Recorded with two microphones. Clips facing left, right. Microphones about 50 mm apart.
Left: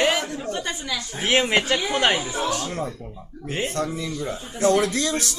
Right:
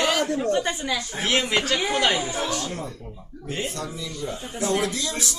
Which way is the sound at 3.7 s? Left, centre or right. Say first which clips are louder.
Left 6 dB; left.